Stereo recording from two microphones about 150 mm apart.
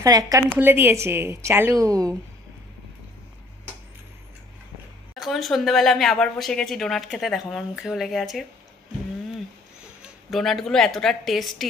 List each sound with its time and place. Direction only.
0.0 s a woman's voice: 25° right (ahead or behind)
5.1 s speech: centre (ahead or behind)
10.3 s speech: centre (ahead or behind)